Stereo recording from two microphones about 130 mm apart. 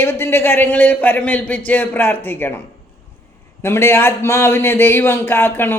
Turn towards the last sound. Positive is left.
turn(degrees=15)  # may be behind; listen again after turning